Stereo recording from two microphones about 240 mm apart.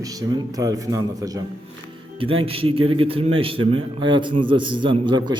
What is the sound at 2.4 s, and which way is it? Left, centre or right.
A man's voice, right.